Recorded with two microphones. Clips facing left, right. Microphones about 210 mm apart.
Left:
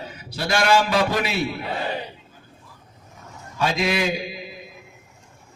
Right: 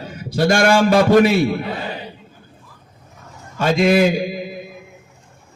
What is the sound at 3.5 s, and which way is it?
Mantra, 50° right (ahead or behind).